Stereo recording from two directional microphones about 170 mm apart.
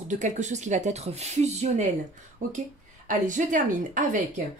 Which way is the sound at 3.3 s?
50° right (ahead or behind).